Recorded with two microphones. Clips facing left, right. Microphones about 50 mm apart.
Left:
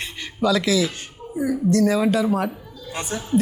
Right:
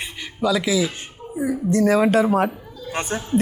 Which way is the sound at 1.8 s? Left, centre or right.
Right.